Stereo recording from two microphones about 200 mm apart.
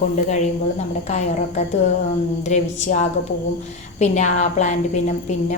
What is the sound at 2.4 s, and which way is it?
A woman's voice, 35° left (ahead or behind).